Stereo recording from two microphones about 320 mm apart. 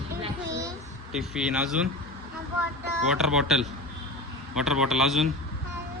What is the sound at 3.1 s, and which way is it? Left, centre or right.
Speech, centre.